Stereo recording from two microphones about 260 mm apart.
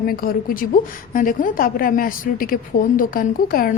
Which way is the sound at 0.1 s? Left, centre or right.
Left.